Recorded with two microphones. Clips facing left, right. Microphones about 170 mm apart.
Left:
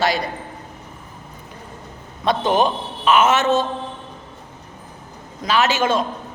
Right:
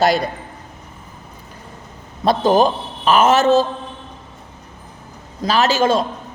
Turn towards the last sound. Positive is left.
turn(degrees=-35)  # may be behind; listen again after turning